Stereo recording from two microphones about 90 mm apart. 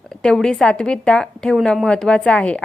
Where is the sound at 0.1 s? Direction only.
5° left (ahead or behind).